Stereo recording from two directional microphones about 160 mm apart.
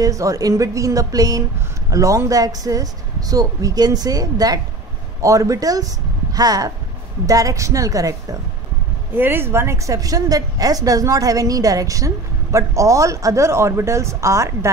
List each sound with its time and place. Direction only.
0.0 s a woman's voice: 20° right (ahead or behind)